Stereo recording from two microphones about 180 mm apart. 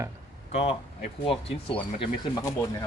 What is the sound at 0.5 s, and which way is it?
Speech, 30° left (ahead or behind).